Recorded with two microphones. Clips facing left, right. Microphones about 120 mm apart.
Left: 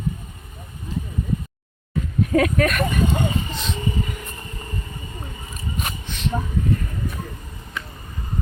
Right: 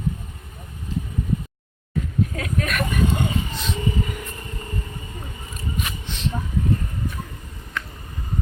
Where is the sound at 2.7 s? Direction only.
Centre (ahead or behind).